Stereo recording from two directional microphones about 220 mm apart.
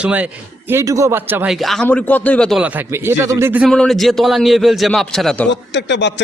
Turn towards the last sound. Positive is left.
turn(degrees=50)  # may be behind; listen again after turning